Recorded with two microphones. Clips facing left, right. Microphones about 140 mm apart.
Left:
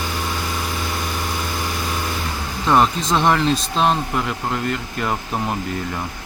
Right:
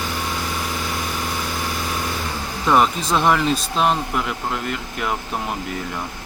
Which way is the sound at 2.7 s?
5° right (ahead or behind).